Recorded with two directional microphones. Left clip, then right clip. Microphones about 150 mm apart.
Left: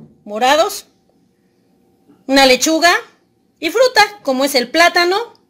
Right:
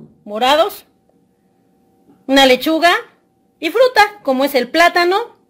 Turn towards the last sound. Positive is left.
turn(degrees=0)  # may be behind; listen again after turning